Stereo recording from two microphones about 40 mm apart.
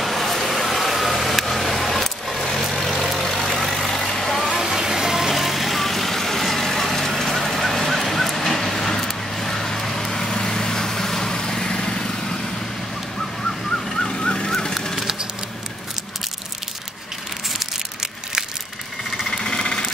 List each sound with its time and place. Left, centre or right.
0.0 s vehicle: centre
4.6 s vehicle: centre
13.8 s vehicle: centre
15.0 s a sound: centre
19.3 s engine: centre